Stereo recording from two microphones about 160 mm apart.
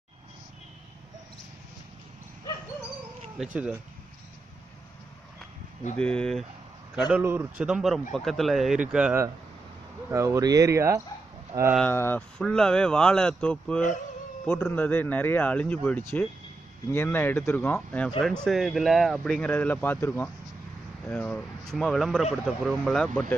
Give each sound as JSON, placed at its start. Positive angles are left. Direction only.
{"t": 3.4, "sound": "speech", "side_deg": 0}
{"t": 5.9, "sound": "speech", "side_deg": 5}
{"t": 7.1, "sound": "speech", "side_deg": -10}
{"t": 10.1, "sound": "speech", "side_deg": -20}
{"t": 11.8, "sound": "speech", "side_deg": 15}